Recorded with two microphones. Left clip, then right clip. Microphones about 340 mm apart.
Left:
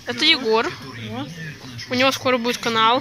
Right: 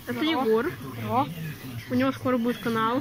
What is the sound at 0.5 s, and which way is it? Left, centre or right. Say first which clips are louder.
Speech: left 5 dB; centre.